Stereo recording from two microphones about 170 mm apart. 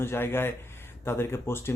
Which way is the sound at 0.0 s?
15° left (ahead or behind).